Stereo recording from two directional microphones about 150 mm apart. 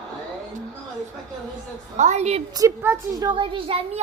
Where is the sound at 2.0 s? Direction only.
50° right (ahead or behind).